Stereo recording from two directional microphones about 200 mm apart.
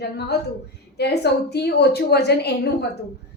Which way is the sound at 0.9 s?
55° left (ahead or behind).